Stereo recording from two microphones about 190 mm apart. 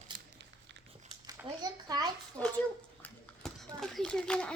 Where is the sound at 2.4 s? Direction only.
5° left (ahead or behind).